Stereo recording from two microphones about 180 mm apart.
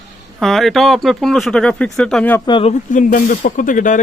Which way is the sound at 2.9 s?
45° left (ahead or behind).